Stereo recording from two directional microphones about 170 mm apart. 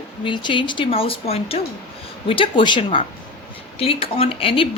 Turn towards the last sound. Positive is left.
turn(degrees=30)  # may be behind; listen again after turning